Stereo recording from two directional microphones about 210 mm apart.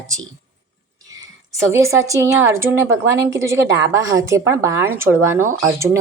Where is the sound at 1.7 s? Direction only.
15° right (ahead or behind).